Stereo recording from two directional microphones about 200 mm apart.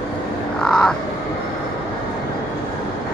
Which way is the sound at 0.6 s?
5° left (ahead or behind).